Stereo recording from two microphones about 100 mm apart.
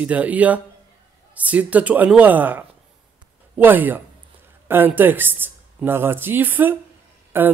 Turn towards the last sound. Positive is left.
turn(degrees=-20)  # may be behind; listen again after turning